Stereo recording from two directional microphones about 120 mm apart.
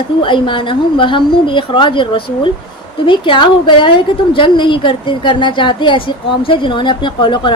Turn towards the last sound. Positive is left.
turn(degrees=40)  # may be behind; listen again after turning